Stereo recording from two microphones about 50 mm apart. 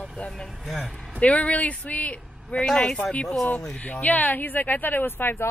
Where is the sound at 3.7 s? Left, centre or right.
Left.